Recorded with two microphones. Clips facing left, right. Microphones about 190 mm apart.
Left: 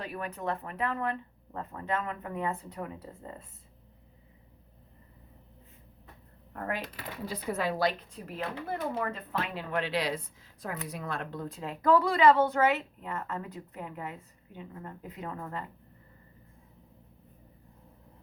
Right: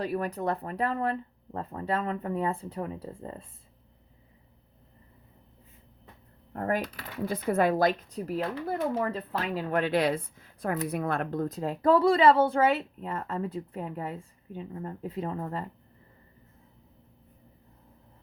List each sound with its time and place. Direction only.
0.0 s speech: 35° right (ahead or behind)
6.5 s speech: 40° right (ahead or behind)
7.3 s speech: 50° right (ahead or behind); by 15.7 s 30° right (ahead or behind)